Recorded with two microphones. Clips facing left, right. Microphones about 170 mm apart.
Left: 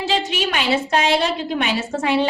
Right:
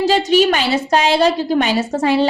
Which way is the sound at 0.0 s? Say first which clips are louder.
Right 9 dB; 40° right (ahead or behind).